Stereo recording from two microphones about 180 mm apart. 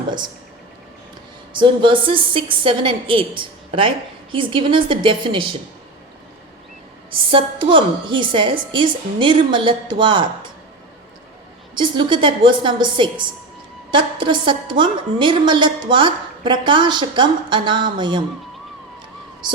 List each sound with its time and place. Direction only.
1.5 s a woman's voice: 25° right (ahead or behind)
7.1 s a woman's voice: 30° right (ahead or behind)
11.7 s a woman's voice: 25° right (ahead or behind)